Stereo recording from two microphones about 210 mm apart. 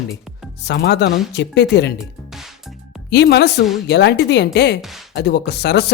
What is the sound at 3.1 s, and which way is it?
Speech, 55° left (ahead or behind).